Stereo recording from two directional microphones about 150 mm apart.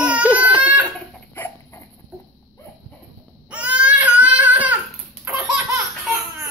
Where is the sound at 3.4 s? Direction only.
10° right (ahead or behind).